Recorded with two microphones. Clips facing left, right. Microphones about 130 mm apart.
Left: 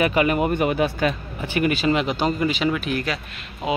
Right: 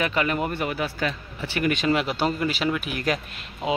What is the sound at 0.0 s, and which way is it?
Speech, 10° left (ahead or behind).